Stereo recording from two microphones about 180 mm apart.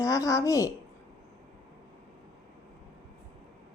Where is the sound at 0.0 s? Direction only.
20° left (ahead or behind).